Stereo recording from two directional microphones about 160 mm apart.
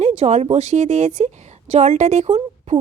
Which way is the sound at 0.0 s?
45° right (ahead or behind).